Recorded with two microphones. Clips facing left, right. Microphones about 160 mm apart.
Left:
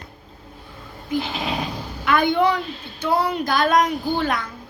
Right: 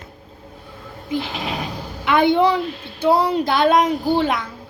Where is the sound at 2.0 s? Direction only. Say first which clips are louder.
Right 3 dB; 25° right (ahead or behind).